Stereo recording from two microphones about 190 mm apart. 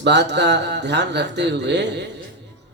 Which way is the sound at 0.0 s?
65° right (ahead or behind).